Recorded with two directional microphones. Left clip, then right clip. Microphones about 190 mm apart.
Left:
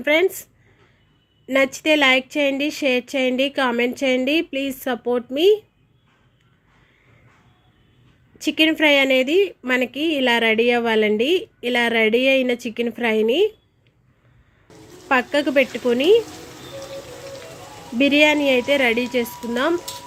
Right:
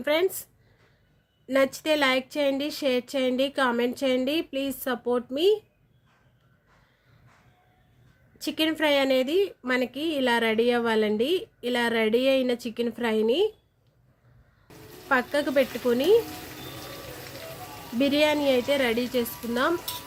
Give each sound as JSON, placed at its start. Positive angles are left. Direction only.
{"t": 0.0, "sound": "a woman's voice", "side_deg": 15}
{"t": 1.5, "sound": "a woman's voice", "side_deg": 15}
{"t": 8.4, "sound": "a woman's voice", "side_deg": 15}
{"t": 15.1, "sound": "a woman's voice", "side_deg": 15}
{"t": 17.9, "sound": "a woman's voice", "side_deg": 15}